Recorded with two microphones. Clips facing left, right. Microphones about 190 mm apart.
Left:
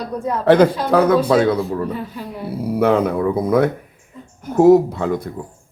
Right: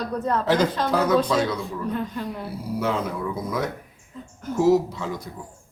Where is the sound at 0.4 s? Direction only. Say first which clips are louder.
Left 12 dB; 60° left (ahead or behind).